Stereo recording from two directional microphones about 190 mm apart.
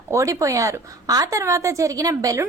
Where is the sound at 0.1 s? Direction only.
15° right (ahead or behind).